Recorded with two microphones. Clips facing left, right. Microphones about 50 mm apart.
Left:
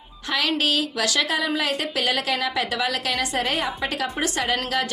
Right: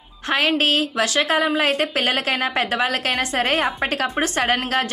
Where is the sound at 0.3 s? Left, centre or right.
Right.